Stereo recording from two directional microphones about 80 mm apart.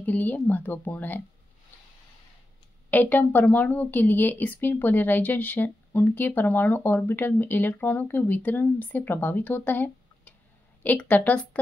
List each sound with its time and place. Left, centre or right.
0.0 s speech: left
2.9 s speech: left